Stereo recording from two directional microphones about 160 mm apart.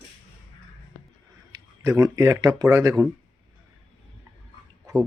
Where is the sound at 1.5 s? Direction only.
20° right (ahead or behind).